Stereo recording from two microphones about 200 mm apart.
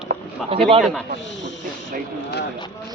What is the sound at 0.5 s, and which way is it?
Speech, 30° right (ahead or behind).